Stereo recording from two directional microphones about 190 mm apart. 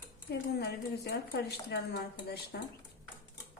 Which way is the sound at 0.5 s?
55° left (ahead or behind).